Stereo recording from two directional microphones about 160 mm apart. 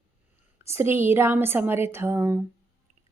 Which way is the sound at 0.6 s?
15° right (ahead or behind).